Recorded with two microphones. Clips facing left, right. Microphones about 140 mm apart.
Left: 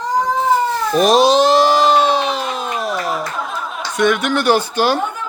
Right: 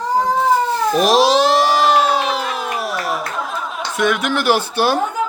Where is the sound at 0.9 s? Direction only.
Centre (ahead or behind).